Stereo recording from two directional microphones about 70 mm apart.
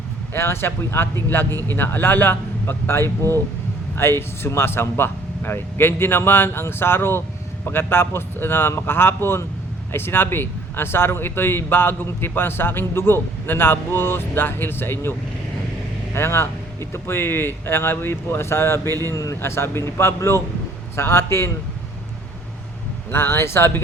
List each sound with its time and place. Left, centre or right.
0.3 s speech: left
16.1 s speech: left
19.1 s speech: left
19.4 s speech: left
23.1 s speech: left